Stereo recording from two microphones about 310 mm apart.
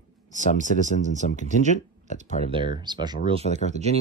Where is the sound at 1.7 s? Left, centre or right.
Left.